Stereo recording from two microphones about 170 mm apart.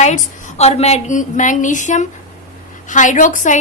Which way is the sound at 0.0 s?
40° left (ahead or behind).